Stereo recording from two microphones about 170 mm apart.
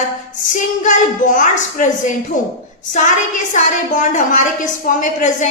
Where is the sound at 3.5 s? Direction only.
50° left (ahead or behind).